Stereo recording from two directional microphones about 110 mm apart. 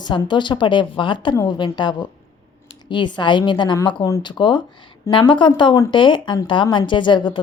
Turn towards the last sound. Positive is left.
turn(degrees=45)  # may be behind; listen again after turning